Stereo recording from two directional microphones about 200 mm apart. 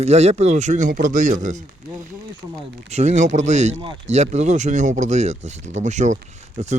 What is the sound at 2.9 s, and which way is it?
Speech, 35° right (ahead or behind).